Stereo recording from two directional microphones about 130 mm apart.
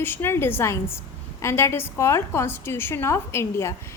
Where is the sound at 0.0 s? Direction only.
15° left (ahead or behind).